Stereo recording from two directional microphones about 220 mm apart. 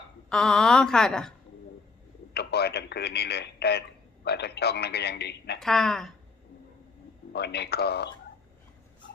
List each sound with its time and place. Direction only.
0.3 s a woman's voice: 5° left (ahead or behind)
2.3 s a man's voice: 50° left (ahead or behind)
5.5 s a woman's voice: centre (ahead or behind)
7.3 s a man's voice: 50° left (ahead or behind)